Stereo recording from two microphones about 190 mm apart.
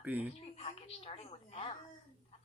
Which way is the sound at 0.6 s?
30° left (ahead or behind).